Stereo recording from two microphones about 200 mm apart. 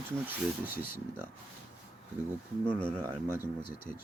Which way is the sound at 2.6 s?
5° left (ahead or behind).